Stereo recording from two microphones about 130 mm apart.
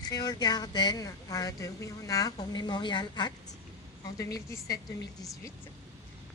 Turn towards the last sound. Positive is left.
turn(degrees=25)  # may be behind; listen again after turning